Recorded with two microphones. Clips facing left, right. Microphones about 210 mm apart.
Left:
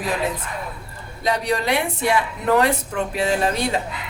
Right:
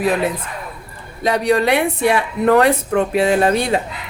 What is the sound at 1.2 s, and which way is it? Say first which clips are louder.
Speech: right 6 dB; 60° right (ahead or behind).